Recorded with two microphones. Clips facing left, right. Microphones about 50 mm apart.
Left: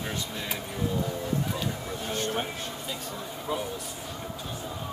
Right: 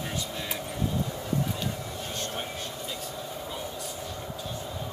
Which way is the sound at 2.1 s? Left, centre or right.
Centre.